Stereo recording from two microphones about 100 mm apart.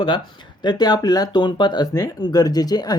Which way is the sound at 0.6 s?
45° left (ahead or behind).